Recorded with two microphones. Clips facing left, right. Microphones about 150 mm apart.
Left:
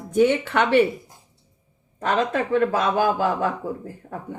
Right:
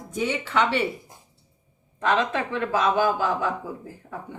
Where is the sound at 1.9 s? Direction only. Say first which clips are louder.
Left 1 dB; 40° left (ahead or behind).